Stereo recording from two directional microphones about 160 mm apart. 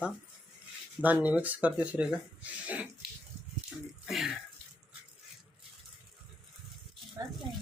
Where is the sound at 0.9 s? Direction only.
10° right (ahead or behind).